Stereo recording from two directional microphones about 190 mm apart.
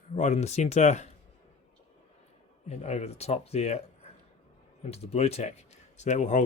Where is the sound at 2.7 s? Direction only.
35° left (ahead or behind).